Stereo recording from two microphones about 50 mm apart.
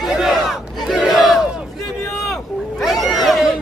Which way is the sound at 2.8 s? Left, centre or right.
Centre.